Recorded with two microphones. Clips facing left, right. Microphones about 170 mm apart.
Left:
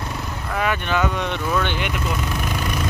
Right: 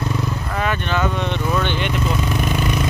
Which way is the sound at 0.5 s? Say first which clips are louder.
Left 1 dB; 10° left (ahead or behind).